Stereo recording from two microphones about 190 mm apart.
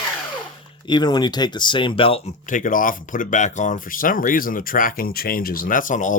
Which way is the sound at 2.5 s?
45° left (ahead or behind).